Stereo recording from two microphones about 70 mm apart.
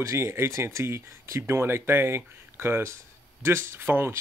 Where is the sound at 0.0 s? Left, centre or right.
Right.